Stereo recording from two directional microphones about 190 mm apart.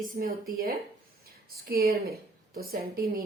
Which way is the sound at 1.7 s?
50° right (ahead or behind).